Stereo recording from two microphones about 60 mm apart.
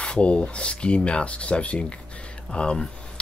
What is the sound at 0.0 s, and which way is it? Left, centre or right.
Speech, centre.